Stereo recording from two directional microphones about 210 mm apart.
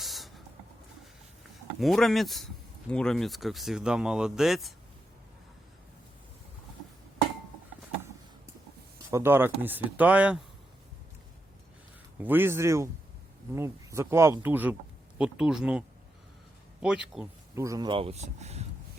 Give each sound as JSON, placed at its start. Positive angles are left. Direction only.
{"t": 0.0, "sound": "a sound", "side_deg": 0}
{"t": 1.8, "sound": "speech", "side_deg": 0}
{"t": 9.0, "sound": "speech", "side_deg": -10}
{"t": 12.2, "sound": "speech", "side_deg": -10}
{"t": 16.8, "sound": "speech", "side_deg": -5}
{"t": 17.5, "sound": "speech", "side_deg": -15}